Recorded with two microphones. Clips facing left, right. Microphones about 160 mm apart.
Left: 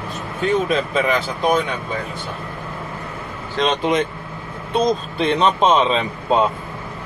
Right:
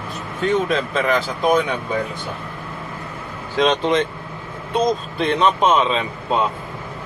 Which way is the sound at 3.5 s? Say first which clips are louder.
Right 1 dB; 5° left (ahead or behind).